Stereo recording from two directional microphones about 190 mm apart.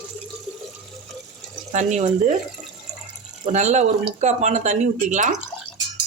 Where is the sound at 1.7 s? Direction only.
35° right (ahead or behind).